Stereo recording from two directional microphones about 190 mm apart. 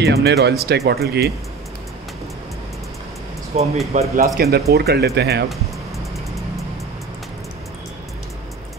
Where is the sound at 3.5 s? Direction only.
35° right (ahead or behind).